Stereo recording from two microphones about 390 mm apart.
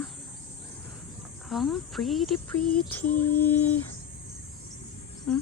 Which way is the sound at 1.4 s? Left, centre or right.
Centre.